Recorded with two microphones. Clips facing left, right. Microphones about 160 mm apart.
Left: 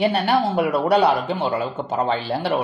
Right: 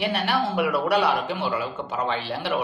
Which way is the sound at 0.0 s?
35° left (ahead or behind).